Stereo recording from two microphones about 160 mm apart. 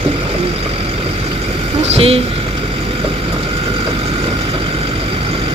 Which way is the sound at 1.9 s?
35° right (ahead or behind).